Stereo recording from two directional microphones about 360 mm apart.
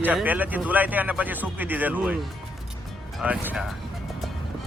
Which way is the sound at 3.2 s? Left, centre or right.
Centre.